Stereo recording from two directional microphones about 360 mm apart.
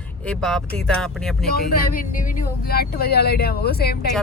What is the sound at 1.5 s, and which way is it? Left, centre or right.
Speech, left.